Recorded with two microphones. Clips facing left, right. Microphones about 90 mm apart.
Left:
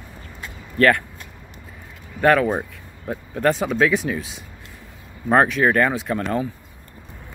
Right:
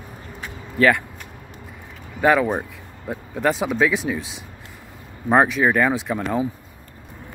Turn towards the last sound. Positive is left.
turn(degrees=-10)  # may be behind; listen again after turning